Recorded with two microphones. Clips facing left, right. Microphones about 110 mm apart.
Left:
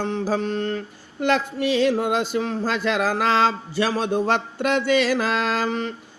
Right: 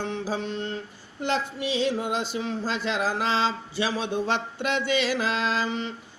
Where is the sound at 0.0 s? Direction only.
40° left (ahead or behind).